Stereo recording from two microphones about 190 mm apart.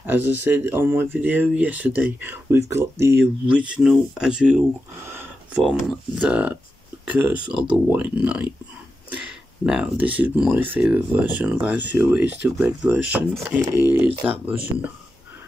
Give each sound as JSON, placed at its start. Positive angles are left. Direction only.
{"t": 0.0, "sound": "speech", "side_deg": -10}
{"t": 9.7, "sound": "speech", "side_deg": -5}